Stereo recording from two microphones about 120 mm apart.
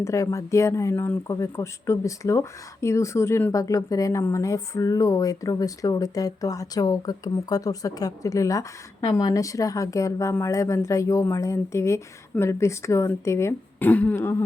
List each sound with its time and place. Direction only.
0.0 s speech: 25° left (ahead or behind)